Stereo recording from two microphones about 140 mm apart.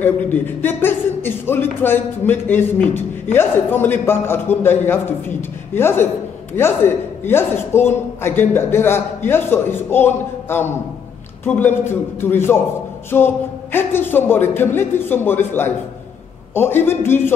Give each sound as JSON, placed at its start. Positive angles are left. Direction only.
{"t": 0.0, "sound": "a man's voice", "side_deg": 15}